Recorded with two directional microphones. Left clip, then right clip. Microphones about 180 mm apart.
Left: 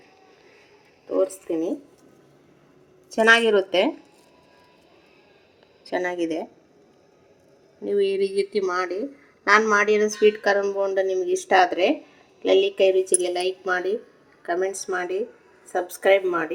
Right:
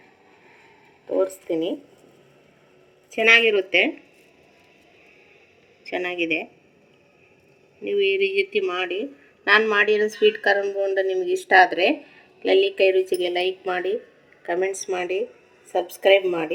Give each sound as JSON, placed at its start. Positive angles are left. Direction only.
{"t": 1.2, "sound": "speech", "side_deg": 25}
{"t": 3.2, "sound": "speech", "side_deg": 30}
{"t": 5.9, "sound": "speech", "side_deg": 20}
{"t": 8.0, "sound": "speech", "side_deg": 90}
{"t": 8.6, "sound": "speech", "side_deg": 20}